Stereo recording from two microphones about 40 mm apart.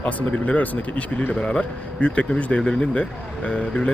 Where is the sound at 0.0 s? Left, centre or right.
Left.